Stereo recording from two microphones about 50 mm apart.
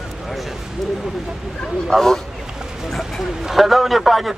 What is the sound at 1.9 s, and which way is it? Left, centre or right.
A man's voice, centre.